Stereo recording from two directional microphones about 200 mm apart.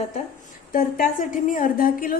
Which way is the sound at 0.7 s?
45° left (ahead or behind).